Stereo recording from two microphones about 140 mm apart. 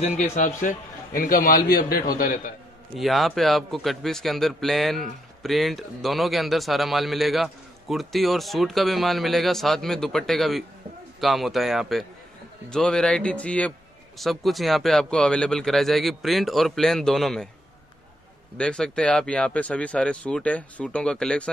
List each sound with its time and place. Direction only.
0.0 s a man's voice: 60° left (ahead or behind); by 2.5 s 85° left
3.0 s a man's voice: centre (ahead or behind)
18.6 s speech: 5° left (ahead or behind)